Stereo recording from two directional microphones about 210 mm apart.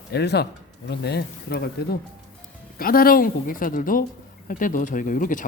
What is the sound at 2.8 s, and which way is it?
Speech, 45° left (ahead or behind).